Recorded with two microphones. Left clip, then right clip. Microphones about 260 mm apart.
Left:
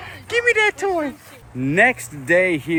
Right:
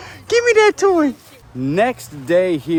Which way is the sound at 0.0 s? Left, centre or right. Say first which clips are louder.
Right 3 dB; right.